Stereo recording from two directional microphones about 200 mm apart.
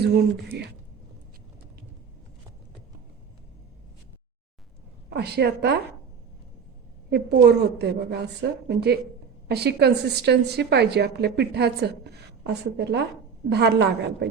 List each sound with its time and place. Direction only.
5.0 s a woman's voice: 55° right (ahead or behind)
7.1 s a woman's voice: 55° right (ahead or behind)